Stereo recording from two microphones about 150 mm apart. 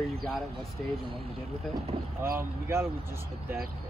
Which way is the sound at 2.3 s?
15° right (ahead or behind).